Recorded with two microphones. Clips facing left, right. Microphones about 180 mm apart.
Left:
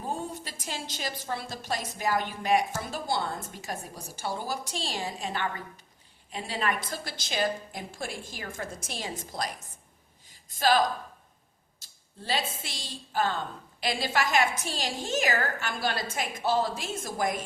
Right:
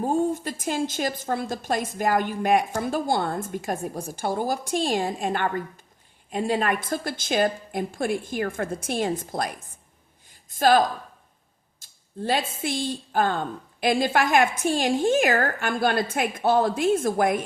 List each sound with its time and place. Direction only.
0.0 s a woman's voice: 45° right (ahead or behind)
10.2 s a sound: 50° right (ahead or behind)
12.5 s a woman's voice: 55° right (ahead or behind)